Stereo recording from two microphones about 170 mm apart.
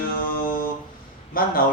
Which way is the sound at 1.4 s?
60° left (ahead or behind).